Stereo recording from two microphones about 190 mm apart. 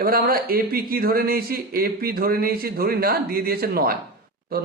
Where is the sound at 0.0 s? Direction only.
50° right (ahead or behind).